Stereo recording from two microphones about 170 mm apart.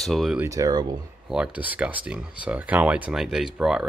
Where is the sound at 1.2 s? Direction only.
5° right (ahead or behind).